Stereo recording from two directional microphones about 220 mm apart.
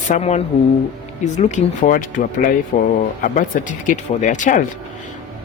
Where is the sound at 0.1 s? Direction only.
30° left (ahead or behind).